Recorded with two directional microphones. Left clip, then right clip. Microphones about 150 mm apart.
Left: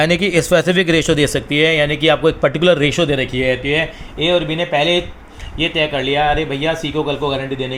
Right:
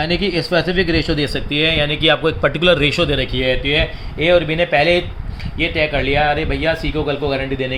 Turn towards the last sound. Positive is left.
turn(degrees=-5)  # may be behind; listen again after turning